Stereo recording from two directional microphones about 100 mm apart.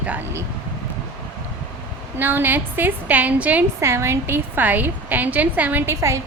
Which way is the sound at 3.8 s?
25° right (ahead or behind).